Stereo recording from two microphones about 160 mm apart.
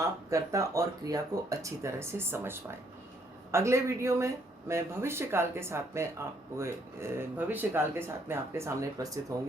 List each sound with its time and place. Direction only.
0.0 s speech: 20° right (ahead or behind)